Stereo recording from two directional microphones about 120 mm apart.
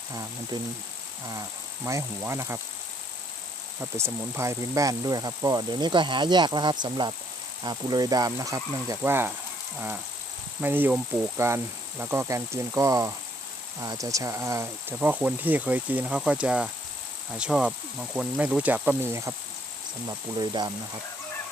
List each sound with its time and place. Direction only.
0.1 s speech: 30° right (ahead or behind)
3.8 s speech: 20° right (ahead or behind)
10.6 s speech: 15° right (ahead or behind)
20.1 s speech: 35° right (ahead or behind)